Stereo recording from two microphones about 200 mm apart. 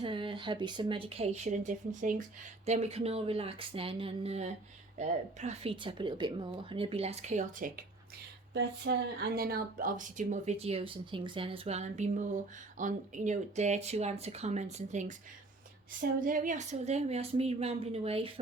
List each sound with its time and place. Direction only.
0.0 s speech: 25° right (ahead or behind); by 7.9 s 40° right (ahead or behind)
8.5 s speech: 50° right (ahead or behind); by 15.1 s 35° right (ahead or behind)
16.2 s speech: 45° right (ahead or behind)